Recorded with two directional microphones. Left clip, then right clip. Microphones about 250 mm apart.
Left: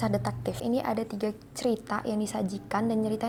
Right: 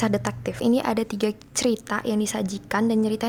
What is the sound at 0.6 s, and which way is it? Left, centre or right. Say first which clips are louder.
A woman's voice: right 7 dB; right.